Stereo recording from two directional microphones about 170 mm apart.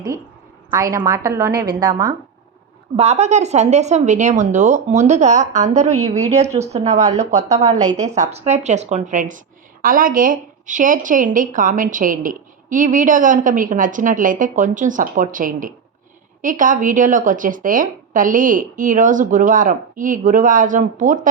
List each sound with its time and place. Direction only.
0.7 s a woman's voice: 20° right (ahead or behind)
2.9 s a woman's voice: 40° right (ahead or behind)
7.7 s a woman's voice: 20° right (ahead or behind)
8.0 s a woman's voice: 40° right (ahead or behind)